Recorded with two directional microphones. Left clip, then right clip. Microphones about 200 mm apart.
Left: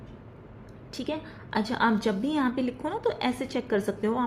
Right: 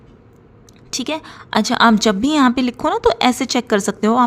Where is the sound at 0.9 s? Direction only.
45° right (ahead or behind).